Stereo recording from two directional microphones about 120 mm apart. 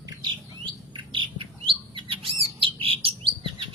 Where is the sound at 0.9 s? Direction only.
45° right (ahead or behind).